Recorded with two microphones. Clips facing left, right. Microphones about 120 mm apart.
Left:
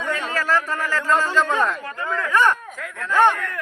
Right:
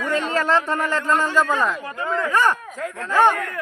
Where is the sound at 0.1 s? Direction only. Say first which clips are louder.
Right 3 dB; 25° right (ahead or behind).